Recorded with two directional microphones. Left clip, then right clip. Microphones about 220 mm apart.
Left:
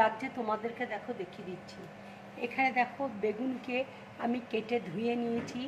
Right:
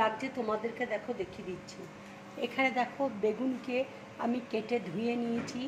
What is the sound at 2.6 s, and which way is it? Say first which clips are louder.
A woman's voice: left 1 dB; 10° left (ahead or behind).